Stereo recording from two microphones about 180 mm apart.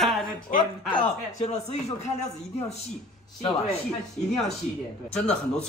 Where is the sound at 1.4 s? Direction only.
35° left (ahead or behind).